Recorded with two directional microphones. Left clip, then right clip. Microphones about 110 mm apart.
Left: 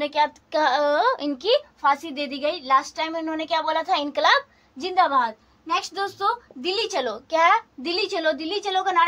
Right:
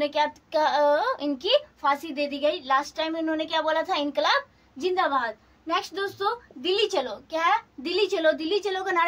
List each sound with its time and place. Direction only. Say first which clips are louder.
0.0 s a child's voice: left 2 dB; 20° left (ahead or behind)
4.8 s a woman's voice: left 4 dB; 25° left (ahead or behind)
7.2 s a child's voice: left 7 dB; 45° left (ahead or behind)
7.9 s a child's voice: right 1 dB; 30° left (ahead or behind)